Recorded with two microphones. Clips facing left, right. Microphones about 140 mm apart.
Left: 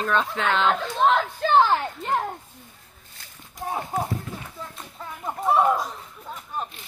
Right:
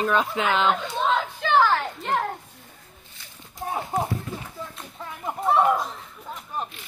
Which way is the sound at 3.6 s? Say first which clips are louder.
Even; 15° right (ahead or behind).